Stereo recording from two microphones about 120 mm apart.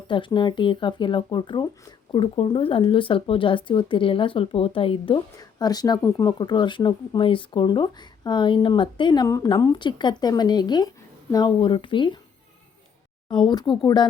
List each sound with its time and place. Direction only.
0.1 s speech: 45° left (ahead or behind)
5.4 s speech: 35° left (ahead or behind)
9.2 s speech: 30° left (ahead or behind)
13.2 s speech: 40° left (ahead or behind)